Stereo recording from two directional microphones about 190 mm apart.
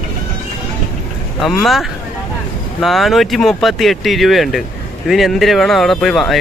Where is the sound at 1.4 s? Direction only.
Centre (ahead or behind).